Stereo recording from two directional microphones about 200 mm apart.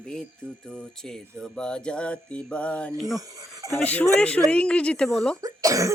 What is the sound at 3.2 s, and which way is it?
Speech, 15° right (ahead or behind).